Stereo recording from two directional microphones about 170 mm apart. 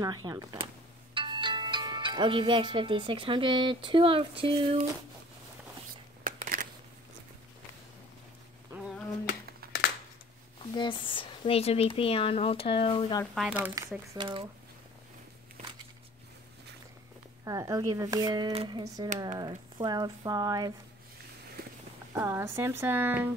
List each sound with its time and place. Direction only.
0.0 s speech: 20° right (ahead or behind)
6.2 s a sound: 55° right (ahead or behind)
9.6 s a sound: 60° right (ahead or behind)
10.6 s speech: 30° left (ahead or behind)
13.2 s speech: centre (ahead or behind)
13.8 s speech: 20° right (ahead or behind)
17.5 s speech: 20° right (ahead or behind)
22.1 s speech: 15° right (ahead or behind)